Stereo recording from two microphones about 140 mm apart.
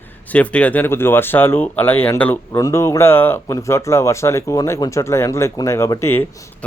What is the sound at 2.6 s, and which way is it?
Speech, 25° left (ahead or behind).